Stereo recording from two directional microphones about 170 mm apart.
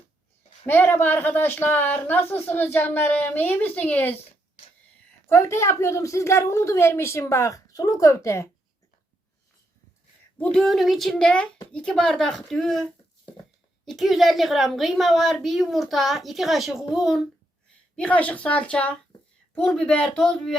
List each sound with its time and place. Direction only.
0.6 s speech: 15° left (ahead or behind)
5.3 s speech: 15° left (ahead or behind)
10.3 s a woman's voice: 5° left (ahead or behind)